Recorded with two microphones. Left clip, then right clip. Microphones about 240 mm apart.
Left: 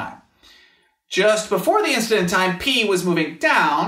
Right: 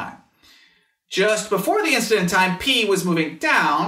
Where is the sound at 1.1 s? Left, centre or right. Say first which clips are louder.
Left 2 dB; left.